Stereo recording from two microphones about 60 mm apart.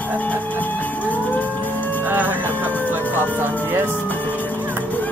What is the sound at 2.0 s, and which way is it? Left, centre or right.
Music, right.